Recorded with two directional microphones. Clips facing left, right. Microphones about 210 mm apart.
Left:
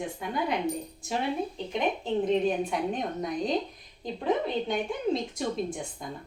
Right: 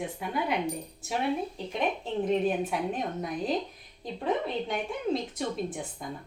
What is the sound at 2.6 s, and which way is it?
Speech, 5° right (ahead or behind).